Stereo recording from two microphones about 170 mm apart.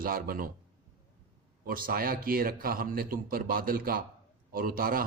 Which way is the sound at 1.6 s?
60° right (ahead or behind).